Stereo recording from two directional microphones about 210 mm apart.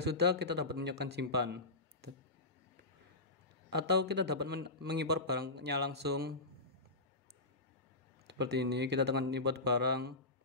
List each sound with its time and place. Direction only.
0.0 s speech: 50° right (ahead or behind)
3.7 s speech: 50° right (ahead or behind)
8.3 s speech: 55° right (ahead or behind)